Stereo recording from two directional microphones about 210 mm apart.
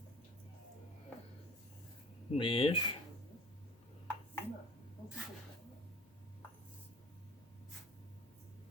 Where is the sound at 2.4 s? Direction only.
25° left (ahead or behind).